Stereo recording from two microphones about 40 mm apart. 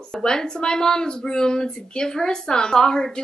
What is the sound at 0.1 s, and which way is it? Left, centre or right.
Speech, centre.